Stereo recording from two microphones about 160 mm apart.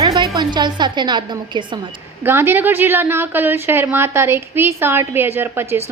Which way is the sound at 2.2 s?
15° right (ahead or behind).